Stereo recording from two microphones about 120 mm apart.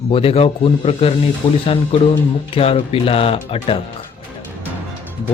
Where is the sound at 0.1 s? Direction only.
55° left (ahead or behind).